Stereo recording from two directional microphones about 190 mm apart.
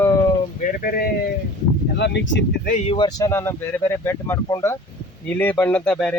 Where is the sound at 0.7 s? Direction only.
50° left (ahead or behind).